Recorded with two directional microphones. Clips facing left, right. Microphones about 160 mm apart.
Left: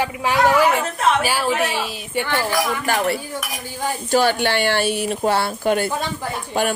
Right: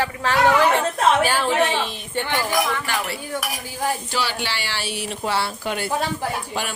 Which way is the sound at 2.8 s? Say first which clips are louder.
Left 6 dB; 50° left (ahead or behind).